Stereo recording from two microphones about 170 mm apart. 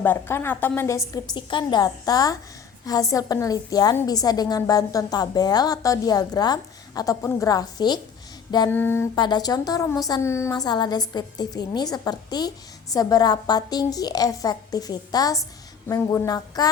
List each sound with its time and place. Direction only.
0.0 s a woman's voice: 10° left (ahead or behind)
8.4 s a sound: 25° left (ahead or behind)
8.7 s a woman's voice: 15° left (ahead or behind)
9.1 s a woman's voice: 25° left (ahead or behind)